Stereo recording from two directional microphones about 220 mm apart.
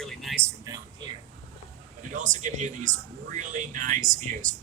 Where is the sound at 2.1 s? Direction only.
35° right (ahead or behind).